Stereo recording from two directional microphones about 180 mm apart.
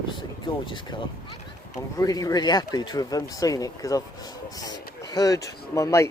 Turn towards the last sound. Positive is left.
turn(degrees=15)  # may be behind; listen again after turning